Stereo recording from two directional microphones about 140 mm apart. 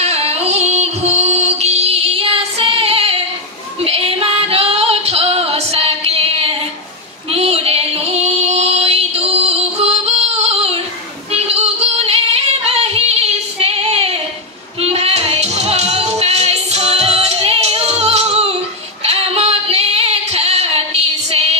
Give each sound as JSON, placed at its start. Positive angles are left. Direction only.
{"t": 0.0, "sound": "music", "side_deg": -50}
{"t": 3.8, "sound": "female singing", "side_deg": -45}
{"t": 7.2, "sound": "a sound", "side_deg": -45}
{"t": 11.3, "sound": "female singing", "side_deg": -45}
{"t": 14.8, "sound": "music", "side_deg": -45}
{"t": 19.0, "sound": "female singing", "side_deg": -45}